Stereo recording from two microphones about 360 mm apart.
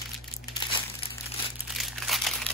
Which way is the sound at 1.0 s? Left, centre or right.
Centre.